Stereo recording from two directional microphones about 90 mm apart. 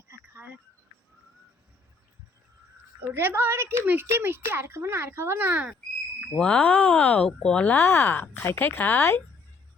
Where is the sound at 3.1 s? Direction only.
25° right (ahead or behind).